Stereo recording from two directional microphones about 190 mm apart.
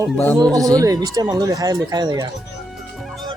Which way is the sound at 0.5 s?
20° right (ahead or behind).